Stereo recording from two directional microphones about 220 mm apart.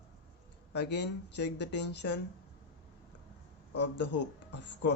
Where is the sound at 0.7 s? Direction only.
50° left (ahead or behind).